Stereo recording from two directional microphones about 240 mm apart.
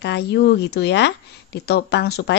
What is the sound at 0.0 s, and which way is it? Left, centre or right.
Speech, left.